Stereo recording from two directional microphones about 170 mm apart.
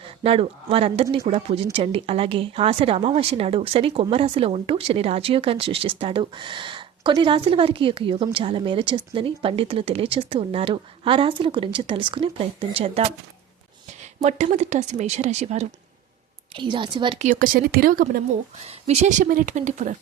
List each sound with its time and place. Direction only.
0.0 s a woman's voice: 35° right (ahead or behind)
16.6 s a woman's voice: 25° right (ahead or behind)
17.2 s speech: 50° right (ahead or behind)
18.7 s speech: 40° right (ahead or behind)